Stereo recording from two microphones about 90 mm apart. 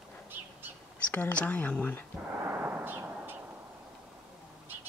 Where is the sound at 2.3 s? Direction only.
25° right (ahead or behind).